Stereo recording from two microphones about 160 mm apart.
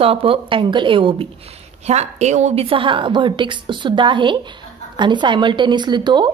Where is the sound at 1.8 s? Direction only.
45° right (ahead or behind).